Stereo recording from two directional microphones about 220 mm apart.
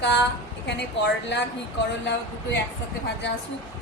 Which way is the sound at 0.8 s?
50° left (ahead or behind).